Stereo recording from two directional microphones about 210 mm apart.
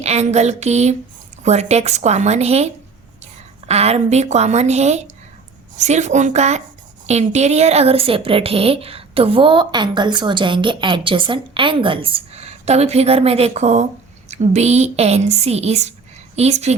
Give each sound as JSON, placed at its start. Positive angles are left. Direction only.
{"t": 0.0, "sound": "a woman's voice", "side_deg": -30}
{"t": 3.7, "sound": "a woman's voice", "side_deg": -30}